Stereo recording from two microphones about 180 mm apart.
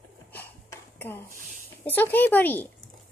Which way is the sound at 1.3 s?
45° right (ahead or behind).